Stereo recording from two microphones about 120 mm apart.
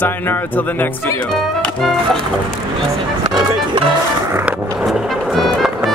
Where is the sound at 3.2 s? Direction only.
40° right (ahead or behind).